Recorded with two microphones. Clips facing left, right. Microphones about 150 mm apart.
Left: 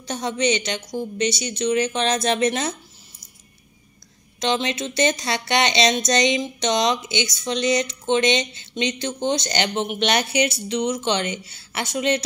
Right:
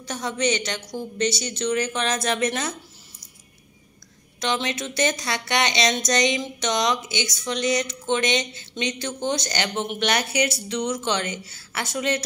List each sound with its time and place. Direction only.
0.0 s speech: 25° left (ahead or behind)
4.4 s speech: 25° left (ahead or behind)